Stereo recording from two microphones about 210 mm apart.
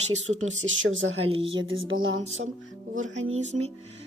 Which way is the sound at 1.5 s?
70° right (ahead or behind).